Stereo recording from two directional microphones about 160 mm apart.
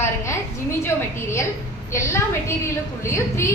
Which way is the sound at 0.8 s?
15° left (ahead or behind).